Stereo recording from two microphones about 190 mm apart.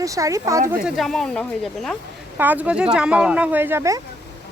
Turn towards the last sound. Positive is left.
turn(degrees=-15)  # may be behind; listen again after turning